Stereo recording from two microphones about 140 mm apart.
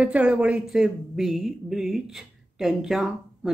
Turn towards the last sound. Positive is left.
turn(degrees=-5)  # may be behind; listen again after turning